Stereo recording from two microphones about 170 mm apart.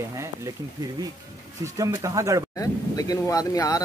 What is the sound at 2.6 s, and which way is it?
Speech, 20° left (ahead or behind).